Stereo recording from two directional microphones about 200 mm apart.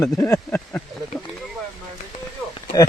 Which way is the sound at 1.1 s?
Centre (ahead or behind).